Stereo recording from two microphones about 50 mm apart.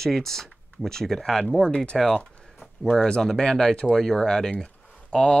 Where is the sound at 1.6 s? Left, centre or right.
Centre.